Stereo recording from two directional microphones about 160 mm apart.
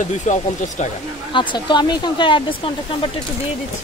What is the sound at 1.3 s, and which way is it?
Speech, 30° left (ahead or behind).